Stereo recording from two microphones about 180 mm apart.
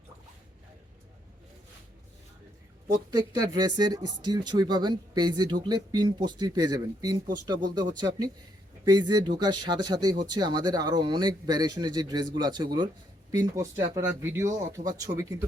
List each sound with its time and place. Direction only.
3.1 s speech: 20° right (ahead or behind)